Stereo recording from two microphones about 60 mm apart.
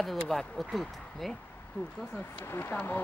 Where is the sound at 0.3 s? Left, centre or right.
Centre.